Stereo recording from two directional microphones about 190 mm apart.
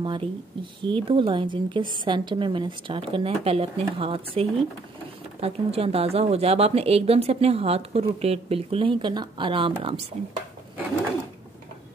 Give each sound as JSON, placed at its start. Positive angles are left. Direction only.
{"t": 0.0, "sound": "a woman's voice", "side_deg": -25}